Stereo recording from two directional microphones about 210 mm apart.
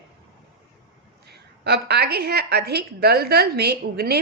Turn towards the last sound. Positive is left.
turn(degrees=-50)  # may be behind; listen again after turning